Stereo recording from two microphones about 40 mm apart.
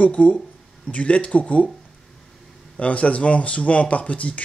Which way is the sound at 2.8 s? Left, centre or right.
Left.